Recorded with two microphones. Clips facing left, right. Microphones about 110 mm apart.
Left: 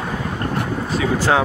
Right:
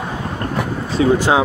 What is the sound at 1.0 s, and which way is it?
Speech, 30° right (ahead or behind).